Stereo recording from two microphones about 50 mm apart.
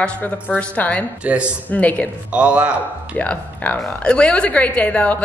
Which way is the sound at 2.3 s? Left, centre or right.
Right.